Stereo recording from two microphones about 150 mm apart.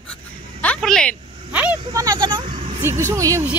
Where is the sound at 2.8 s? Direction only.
15° right (ahead or behind).